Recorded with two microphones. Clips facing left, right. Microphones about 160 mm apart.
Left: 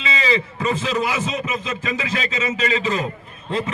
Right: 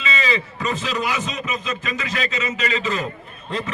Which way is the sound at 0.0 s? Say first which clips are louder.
Left 2 dB; 30° left (ahead or behind).